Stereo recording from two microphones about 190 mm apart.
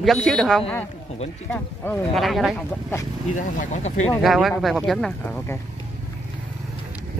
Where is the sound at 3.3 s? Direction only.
40° left (ahead or behind).